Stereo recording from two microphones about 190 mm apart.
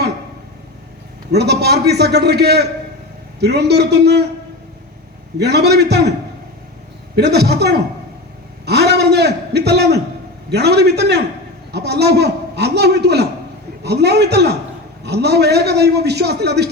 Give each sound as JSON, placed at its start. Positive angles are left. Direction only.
{"t": 1.3, "sound": "a man's voice", "side_deg": -60}
{"t": 5.4, "sound": "a man's voice", "side_deg": -60}
{"t": 7.2, "sound": "a man's voice", "side_deg": -60}
{"t": 8.6, "sound": "a sound", "side_deg": -60}
{"t": 10.5, "sound": "a man's voice", "side_deg": -60}